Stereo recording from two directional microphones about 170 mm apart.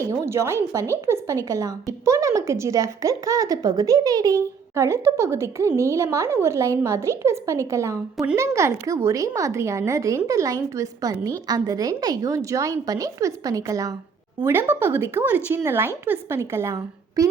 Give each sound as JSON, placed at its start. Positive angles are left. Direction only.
{"t": 0.0, "sound": "a woman's voice", "side_deg": -15}